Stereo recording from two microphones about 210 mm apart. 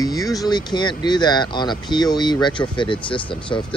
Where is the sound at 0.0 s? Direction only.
15° left (ahead or behind).